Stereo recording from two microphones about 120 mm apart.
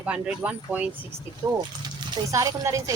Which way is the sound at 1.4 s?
30° right (ahead or behind).